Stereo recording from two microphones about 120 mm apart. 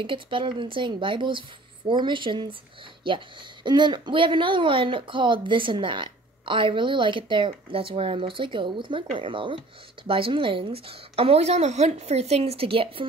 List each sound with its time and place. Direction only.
0.0 s speech: 45° right (ahead or behind)
3.6 s a woman's voice: 40° right (ahead or behind)